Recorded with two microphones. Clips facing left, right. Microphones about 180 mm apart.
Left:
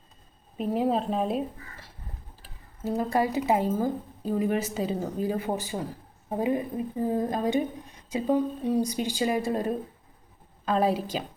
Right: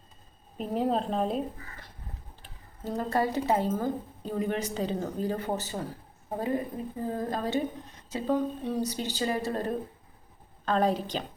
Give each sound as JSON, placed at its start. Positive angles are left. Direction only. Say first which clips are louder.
{"t": 0.5, "sound": "a woman's voice", "louder": "left 2 dB", "side_deg": 0}